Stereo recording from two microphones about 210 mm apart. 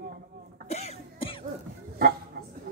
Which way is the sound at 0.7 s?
30° left (ahead or behind).